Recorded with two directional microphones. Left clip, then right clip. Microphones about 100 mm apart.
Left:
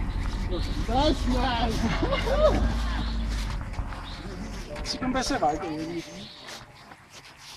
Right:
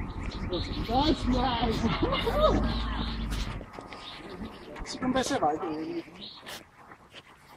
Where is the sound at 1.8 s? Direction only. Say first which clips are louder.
Left 1 dB; 30° left (ahead or behind).